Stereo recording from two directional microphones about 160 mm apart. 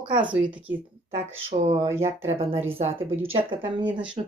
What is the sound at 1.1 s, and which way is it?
Speech, 40° right (ahead or behind).